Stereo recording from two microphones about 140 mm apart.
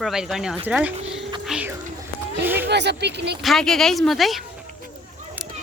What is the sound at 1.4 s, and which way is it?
Music, 5° right (ahead or behind).